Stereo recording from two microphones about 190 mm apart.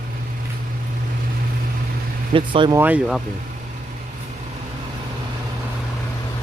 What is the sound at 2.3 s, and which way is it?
Speech, 25° right (ahead or behind).